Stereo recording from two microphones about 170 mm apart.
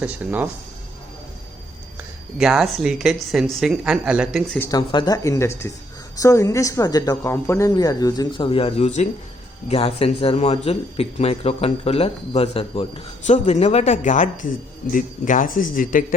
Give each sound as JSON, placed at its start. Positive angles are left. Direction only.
{"t": 0.0, "sound": "speech", "side_deg": -10}
{"t": 2.0, "sound": "speech", "side_deg": 0}
{"t": 4.7, "sound": "a man's voice", "side_deg": 25}